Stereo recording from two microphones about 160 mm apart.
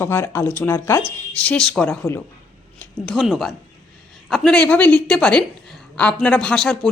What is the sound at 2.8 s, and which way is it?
A woman's voice, centre (ahead or behind).